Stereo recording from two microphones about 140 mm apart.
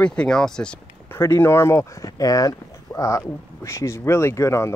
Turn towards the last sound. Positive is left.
turn(degrees=20)  # may be behind; listen again after turning